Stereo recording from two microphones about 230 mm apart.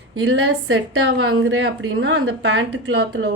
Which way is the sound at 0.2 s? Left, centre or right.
Right.